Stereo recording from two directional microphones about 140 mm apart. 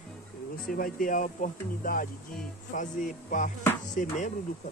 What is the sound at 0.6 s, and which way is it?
Speech, 80° left.